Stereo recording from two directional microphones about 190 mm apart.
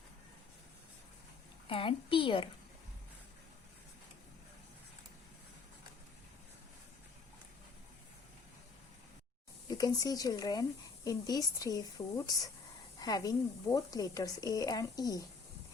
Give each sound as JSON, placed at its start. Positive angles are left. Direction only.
{"t": 1.6, "sound": "speech", "side_deg": 30}
{"t": 9.6, "sound": "speech", "side_deg": 20}